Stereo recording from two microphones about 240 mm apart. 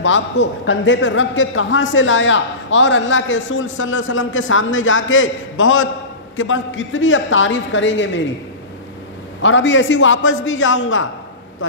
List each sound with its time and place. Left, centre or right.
0.0 s a man's voice: left
9.4 s a man's voice: left